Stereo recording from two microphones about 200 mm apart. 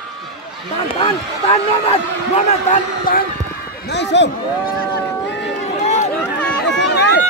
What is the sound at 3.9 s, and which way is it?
Speech, 60° left (ahead or behind).